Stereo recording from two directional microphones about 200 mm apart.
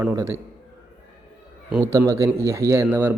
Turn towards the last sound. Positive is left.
turn(degrees=-10)  # may be behind; listen again after turning